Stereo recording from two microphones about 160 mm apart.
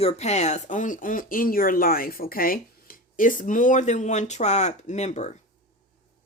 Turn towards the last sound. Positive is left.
turn(degrees=45)  # may be behind; listen again after turning